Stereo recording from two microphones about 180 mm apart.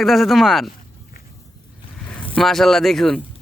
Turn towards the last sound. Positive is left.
turn(degrees=0)  # may be behind; listen again after turning